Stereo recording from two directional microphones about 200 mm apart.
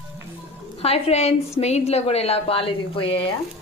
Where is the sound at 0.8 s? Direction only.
30° left (ahead or behind).